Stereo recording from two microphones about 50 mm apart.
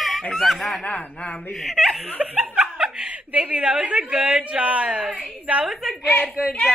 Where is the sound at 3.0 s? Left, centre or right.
Right.